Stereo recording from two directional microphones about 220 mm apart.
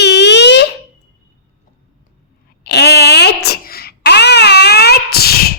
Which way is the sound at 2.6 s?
50° left (ahead or behind).